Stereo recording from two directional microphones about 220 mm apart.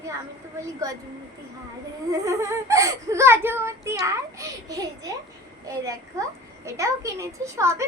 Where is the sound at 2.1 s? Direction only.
15° right (ahead or behind).